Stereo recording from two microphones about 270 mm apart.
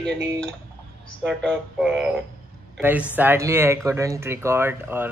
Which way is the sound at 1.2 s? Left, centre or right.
Centre.